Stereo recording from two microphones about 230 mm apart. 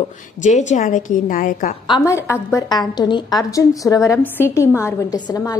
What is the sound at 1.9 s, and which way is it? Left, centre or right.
A woman's voice, centre.